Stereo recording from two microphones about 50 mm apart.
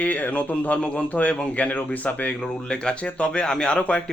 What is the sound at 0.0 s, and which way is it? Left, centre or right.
Speech, left.